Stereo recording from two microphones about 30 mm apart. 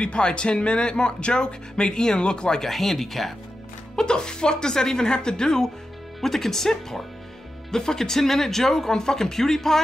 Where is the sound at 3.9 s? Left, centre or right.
Left.